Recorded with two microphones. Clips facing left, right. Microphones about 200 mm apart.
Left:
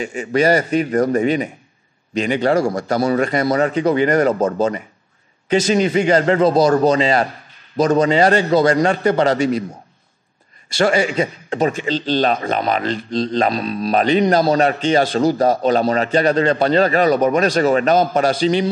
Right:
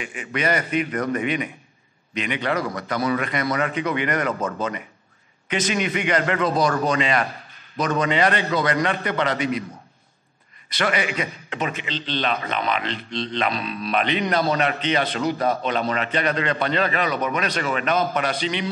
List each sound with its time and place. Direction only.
0.0 s a man's voice: 40° left (ahead or behind)
10.7 s a man's voice: 30° left (ahead or behind)